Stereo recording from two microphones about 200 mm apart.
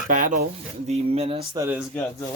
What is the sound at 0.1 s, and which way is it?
Speech, 40° right (ahead or behind).